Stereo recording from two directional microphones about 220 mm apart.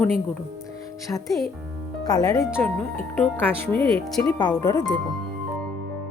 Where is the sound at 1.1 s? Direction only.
15° left (ahead or behind).